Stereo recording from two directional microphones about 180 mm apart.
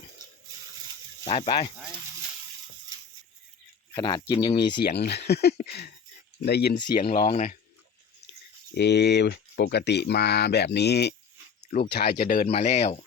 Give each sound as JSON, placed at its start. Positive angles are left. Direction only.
{"t": 1.3, "sound": "speech", "side_deg": 30}
{"t": 3.9, "sound": "speech", "side_deg": 20}
{"t": 4.8, "sound": "speech", "side_deg": 65}
{"t": 8.7, "sound": "speech", "side_deg": 70}
{"t": 12.5, "sound": "speech", "side_deg": 35}